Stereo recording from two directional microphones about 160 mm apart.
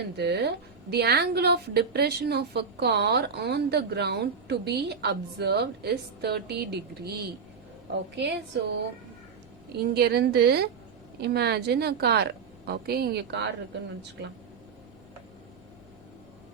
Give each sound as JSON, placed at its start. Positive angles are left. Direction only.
{"t": 0.2, "sound": "a woman's voice", "side_deg": -90}
{"t": 9.8, "sound": "a woman's voice", "side_deg": -80}